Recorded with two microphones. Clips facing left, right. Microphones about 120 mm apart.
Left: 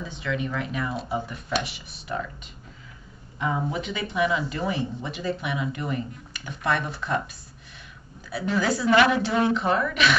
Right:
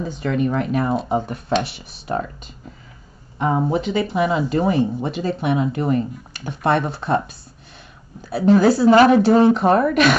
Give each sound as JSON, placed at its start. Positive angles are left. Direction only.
{"t": 0.0, "sound": "speech", "side_deg": -45}
{"t": 6.6, "sound": "speech", "side_deg": -30}
{"t": 8.8, "sound": "speech", "side_deg": -35}